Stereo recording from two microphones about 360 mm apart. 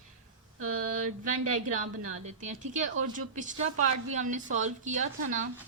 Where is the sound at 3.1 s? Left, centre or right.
Right.